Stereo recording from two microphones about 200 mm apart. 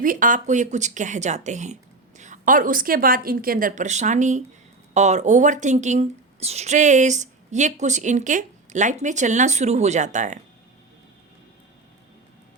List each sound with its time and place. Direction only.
0.0 s speech: 40° right (ahead or behind)